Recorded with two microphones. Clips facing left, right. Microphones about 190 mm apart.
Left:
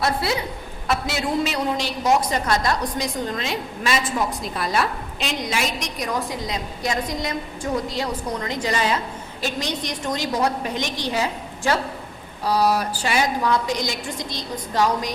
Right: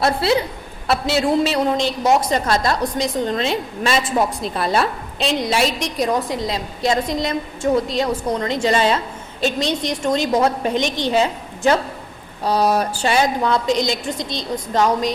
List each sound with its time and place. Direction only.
0.2 s a woman's voice: 30° right (ahead or behind)